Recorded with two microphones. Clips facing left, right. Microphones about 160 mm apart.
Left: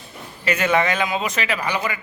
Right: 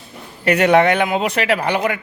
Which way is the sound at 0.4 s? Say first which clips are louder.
Right 7 dB; 70° right (ahead or behind).